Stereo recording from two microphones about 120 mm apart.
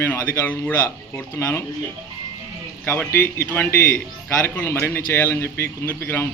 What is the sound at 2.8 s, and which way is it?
A man's voice, 15° left (ahead or behind).